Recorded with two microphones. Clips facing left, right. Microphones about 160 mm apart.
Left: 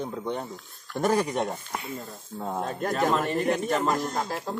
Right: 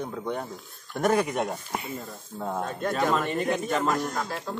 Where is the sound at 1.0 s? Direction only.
Centre (ahead or behind).